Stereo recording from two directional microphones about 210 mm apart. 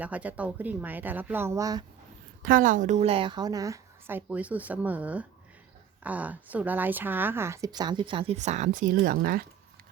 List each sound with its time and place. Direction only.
0.0 s a woman's voice: 5° right (ahead or behind)
2.4 s a woman's voice: 40° right (ahead or behind)